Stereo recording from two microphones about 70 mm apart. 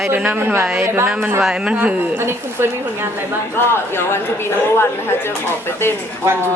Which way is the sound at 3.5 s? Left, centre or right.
Left.